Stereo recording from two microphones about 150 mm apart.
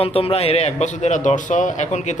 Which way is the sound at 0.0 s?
40° left (ahead or behind).